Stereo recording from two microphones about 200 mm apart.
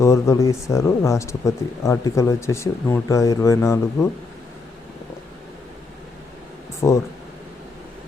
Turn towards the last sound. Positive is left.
turn(degrees=15)  # may be behind; listen again after turning